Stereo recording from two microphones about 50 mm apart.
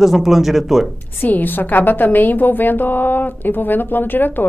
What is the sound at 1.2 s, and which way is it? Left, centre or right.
A woman's voice, left.